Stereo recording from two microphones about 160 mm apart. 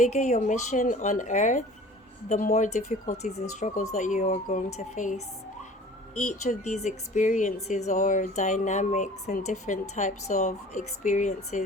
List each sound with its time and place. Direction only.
0.0 s speech: 45° left (ahead or behind)